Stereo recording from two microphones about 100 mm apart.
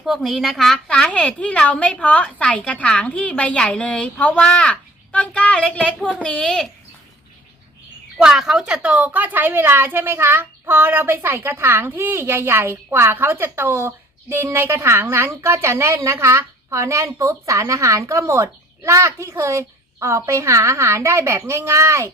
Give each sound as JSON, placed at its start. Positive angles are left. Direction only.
{"t": 0.0, "sound": "a woman's voice", "side_deg": 0}
{"t": 8.2, "sound": "a woman's voice", "side_deg": -5}